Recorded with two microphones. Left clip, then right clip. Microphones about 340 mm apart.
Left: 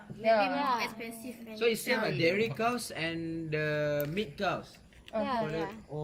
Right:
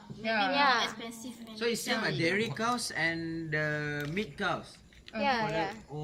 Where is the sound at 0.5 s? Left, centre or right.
Right.